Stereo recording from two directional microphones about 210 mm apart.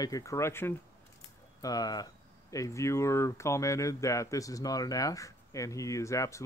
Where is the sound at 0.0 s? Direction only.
15° left (ahead or behind).